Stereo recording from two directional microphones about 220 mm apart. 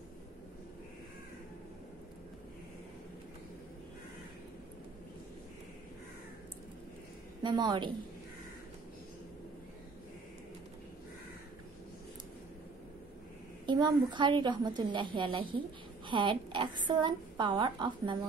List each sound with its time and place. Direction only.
7.4 s a woman's voice: 20° right (ahead or behind)
13.7 s a woman's voice: 20° right (ahead or behind)